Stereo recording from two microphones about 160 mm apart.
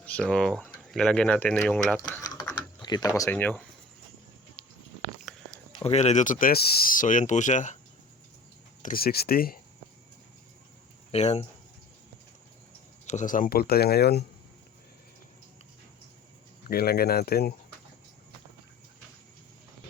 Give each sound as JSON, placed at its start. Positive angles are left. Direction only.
{"t": 0.0, "sound": "speech", "side_deg": 5}
{"t": 2.2, "sound": "typing", "side_deg": 20}
{"t": 3.2, "sound": "speech", "side_deg": 10}
{"t": 5.8, "sound": "speech", "side_deg": 40}
{"t": 8.8, "sound": "speech", "side_deg": 65}
{"t": 11.1, "sound": "speech", "side_deg": 40}
{"t": 13.1, "sound": "speech", "side_deg": 50}
{"t": 16.6, "sound": "speech", "side_deg": 75}